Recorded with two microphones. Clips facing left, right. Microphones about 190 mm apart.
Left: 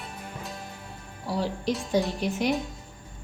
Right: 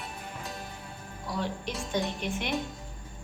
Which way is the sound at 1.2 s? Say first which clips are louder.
Left 5 dB; 35° left (ahead or behind).